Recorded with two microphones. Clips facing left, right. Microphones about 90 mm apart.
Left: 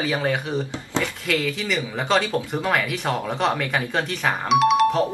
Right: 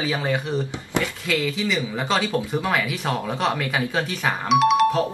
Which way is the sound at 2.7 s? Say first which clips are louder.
Left 3 dB; centre (ahead or behind).